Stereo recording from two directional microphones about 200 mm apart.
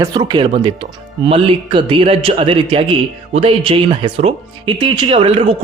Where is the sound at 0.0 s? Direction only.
20° right (ahead or behind).